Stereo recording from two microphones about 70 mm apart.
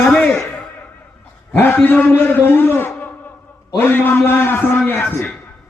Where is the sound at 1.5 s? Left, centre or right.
Left.